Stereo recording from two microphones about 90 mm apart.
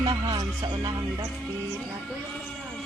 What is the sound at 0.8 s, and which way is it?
Speech, 45° right (ahead or behind).